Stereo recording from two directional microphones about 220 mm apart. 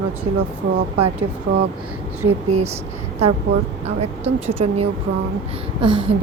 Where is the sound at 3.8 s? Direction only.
30° right (ahead or behind).